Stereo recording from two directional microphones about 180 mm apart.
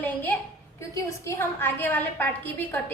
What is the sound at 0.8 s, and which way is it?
A woman's voice, 15° left (ahead or behind).